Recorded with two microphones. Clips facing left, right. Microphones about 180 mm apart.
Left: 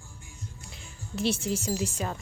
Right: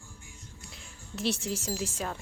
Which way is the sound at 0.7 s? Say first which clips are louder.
Left 4 dB; centre (ahead or behind).